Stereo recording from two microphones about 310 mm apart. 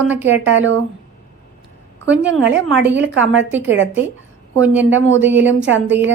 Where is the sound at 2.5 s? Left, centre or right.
Centre.